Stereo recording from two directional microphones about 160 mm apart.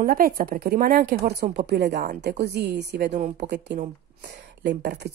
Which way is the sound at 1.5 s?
90° right.